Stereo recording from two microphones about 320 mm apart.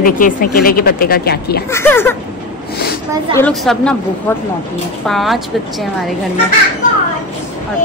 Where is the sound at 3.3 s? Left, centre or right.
Centre.